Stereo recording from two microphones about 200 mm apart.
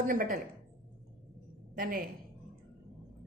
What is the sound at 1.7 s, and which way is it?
Speech, 45° right (ahead or behind).